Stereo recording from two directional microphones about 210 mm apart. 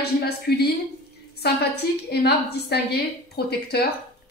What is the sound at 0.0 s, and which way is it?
A woman's voice, 50° left (ahead or behind).